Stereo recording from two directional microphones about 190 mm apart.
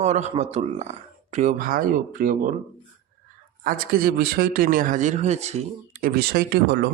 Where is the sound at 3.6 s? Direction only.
50° right (ahead or behind); by 5.6 s 35° right (ahead or behind).